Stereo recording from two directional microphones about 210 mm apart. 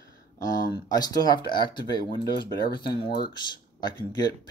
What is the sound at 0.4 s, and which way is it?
Speech, 20° left (ahead or behind).